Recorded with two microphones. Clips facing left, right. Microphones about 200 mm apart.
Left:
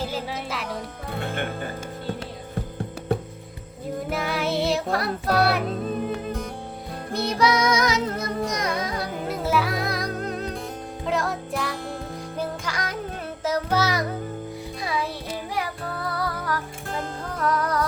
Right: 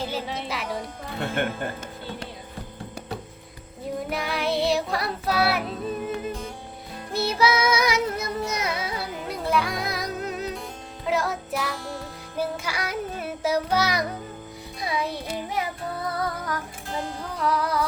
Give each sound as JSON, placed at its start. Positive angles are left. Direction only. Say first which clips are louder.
{"t": 0.1, "sound": "music", "louder": "even", "side_deg": 0}
{"t": 4.1, "sound": "music", "louder": "left 1 dB", "side_deg": 0}
{"t": 7.1, "sound": "child singing", "louder": "left 1 dB", "side_deg": -5}
{"t": 11.0, "sound": "music", "louder": "even", "side_deg": 0}